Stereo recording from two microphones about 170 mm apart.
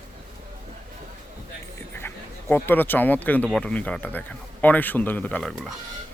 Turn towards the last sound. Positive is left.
turn(degrees=0)  # may be behind; listen again after turning